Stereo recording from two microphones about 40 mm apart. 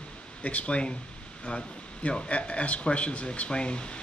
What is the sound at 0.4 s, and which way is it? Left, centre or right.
Speech, left.